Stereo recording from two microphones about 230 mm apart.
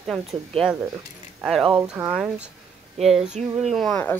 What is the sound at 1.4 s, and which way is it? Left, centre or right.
Speech, centre.